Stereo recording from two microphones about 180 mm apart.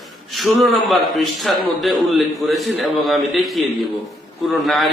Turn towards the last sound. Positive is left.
turn(degrees=0)  # may be behind; listen again after turning